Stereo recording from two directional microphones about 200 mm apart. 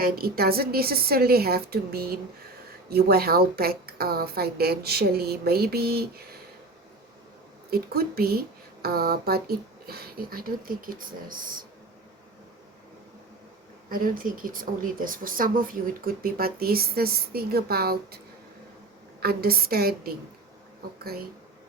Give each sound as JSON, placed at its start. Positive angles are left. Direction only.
{"t": 0.0, "sound": "speech", "side_deg": -50}
{"t": 7.7, "sound": "speech", "side_deg": -50}
{"t": 13.9, "sound": "speech", "side_deg": -45}
{"t": 19.2, "sound": "speech", "side_deg": -50}